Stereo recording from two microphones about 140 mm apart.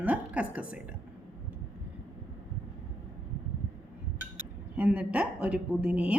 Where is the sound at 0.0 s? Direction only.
10° right (ahead or behind).